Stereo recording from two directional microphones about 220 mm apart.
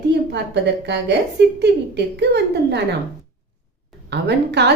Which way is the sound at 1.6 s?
50° right (ahead or behind).